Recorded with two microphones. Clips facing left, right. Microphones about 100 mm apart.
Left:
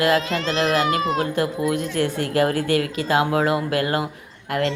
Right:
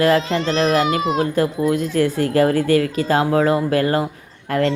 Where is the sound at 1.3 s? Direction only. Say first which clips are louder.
Right 4 dB; 35° right (ahead or behind).